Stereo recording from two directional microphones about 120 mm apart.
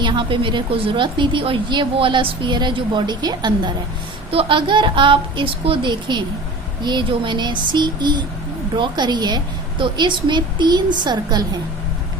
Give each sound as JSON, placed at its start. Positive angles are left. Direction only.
{"t": 0.0, "sound": "a woman's voice", "side_deg": -40}
{"t": 4.3, "sound": "a woman's voice", "side_deg": -45}